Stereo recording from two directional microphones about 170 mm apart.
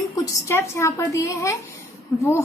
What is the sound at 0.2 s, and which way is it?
A woman's voice, 15° left (ahead or behind).